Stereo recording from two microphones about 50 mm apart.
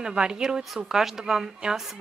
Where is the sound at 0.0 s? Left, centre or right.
Centre.